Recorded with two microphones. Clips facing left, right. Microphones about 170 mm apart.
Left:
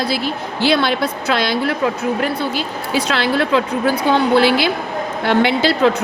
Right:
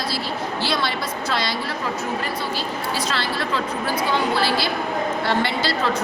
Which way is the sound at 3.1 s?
65° left (ahead or behind).